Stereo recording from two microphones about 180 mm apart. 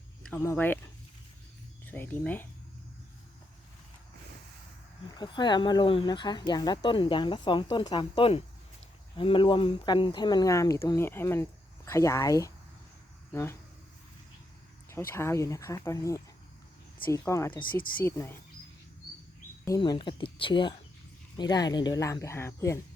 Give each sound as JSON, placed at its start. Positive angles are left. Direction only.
{"t": 0.2, "sound": "speech", "side_deg": 10}
{"t": 1.9, "sound": "speech", "side_deg": 10}
{"t": 5.1, "sound": "speech", "side_deg": 25}
{"t": 14.8, "sound": "speech", "side_deg": 15}
{"t": 19.6, "sound": "speech", "side_deg": 20}